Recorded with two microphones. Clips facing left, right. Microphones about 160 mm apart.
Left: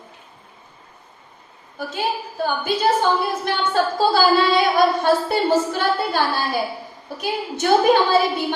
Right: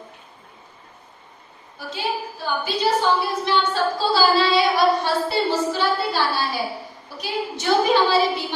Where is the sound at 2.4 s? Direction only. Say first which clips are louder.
Left 3 dB; 50° left (ahead or behind).